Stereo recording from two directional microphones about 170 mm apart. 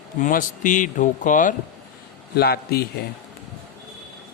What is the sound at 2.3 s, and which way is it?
Speech, 70° left (ahead or behind).